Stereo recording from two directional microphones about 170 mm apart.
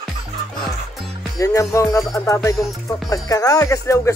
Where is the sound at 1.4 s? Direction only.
20° left (ahead or behind).